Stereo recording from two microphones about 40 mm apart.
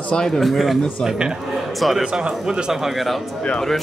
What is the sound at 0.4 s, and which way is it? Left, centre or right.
Speech, centre.